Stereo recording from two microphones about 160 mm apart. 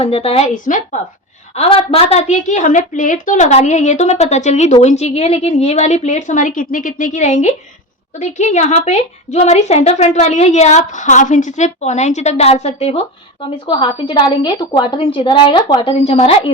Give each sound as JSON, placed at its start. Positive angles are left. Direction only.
{"t": 0.0, "sound": "a woman's voice", "side_deg": 40}
{"t": 1.5, "sound": "a woman's voice", "side_deg": 40}